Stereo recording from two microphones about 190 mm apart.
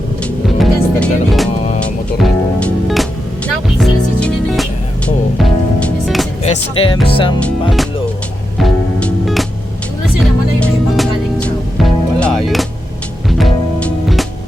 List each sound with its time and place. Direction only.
0.2 s music: 5° left (ahead or behind)
6.4 s speech: 35° left (ahead or behind)
7.1 s music: 25° left (ahead or behind)
7.4 s music: centre (ahead or behind)
10.6 s music: 5° left (ahead or behind)